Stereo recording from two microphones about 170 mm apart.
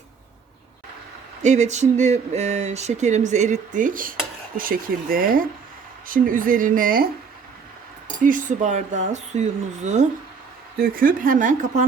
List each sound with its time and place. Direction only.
1.4 s speech: 45° right (ahead or behind)
8.2 s speech: 50° right (ahead or behind)
10.8 s speech: 55° right (ahead or behind)